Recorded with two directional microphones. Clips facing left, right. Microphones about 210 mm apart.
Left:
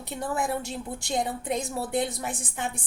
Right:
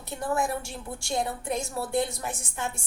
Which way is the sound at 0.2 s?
20° left (ahead or behind).